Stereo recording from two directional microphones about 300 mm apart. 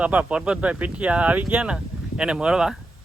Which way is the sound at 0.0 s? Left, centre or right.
Centre.